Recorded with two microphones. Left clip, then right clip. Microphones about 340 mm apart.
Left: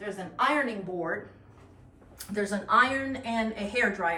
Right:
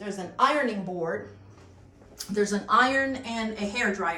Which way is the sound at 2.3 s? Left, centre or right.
Centre.